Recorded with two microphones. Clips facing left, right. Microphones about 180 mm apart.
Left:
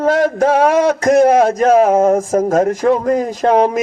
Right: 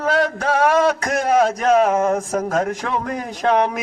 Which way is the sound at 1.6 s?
45° left (ahead or behind).